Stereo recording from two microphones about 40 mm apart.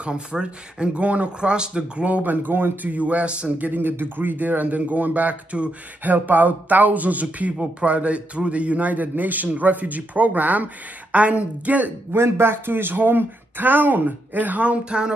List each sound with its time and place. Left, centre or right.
0.0 s speech: right
2.2 s speech: right
2.9 s speech: right
6.1 s speech: right
12.1 s speech: right
14.9 s speech: right